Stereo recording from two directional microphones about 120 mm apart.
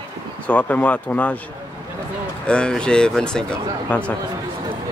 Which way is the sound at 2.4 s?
5° left (ahead or behind).